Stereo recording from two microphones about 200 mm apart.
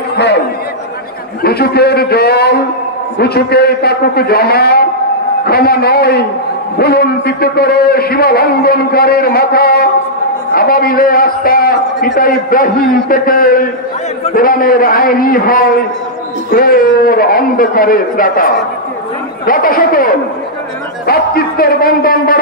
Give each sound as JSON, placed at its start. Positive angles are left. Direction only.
{"t": 1.4, "sound": "a man's voice", "side_deg": 50}